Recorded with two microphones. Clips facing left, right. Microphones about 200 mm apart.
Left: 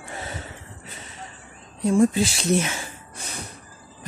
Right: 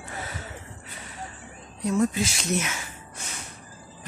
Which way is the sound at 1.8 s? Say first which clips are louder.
Left 5 dB; 30° left (ahead or behind).